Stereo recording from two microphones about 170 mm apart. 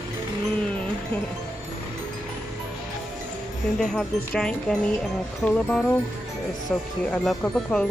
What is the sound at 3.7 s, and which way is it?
Speech, 5° left (ahead or behind).